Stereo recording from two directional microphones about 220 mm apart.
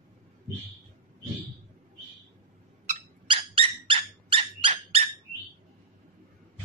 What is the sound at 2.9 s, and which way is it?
Dog, 25° right (ahead or behind).